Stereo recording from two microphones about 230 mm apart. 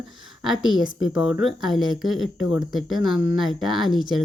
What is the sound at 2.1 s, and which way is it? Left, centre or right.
Speech, left.